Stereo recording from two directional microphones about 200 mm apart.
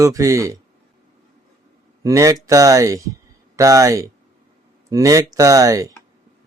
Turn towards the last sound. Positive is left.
turn(degrees=-15)  # may be behind; listen again after turning